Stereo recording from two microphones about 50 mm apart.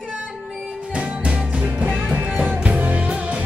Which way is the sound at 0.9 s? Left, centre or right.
Right.